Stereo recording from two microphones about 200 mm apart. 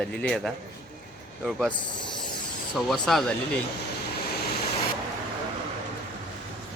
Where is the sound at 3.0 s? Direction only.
5° left (ahead or behind).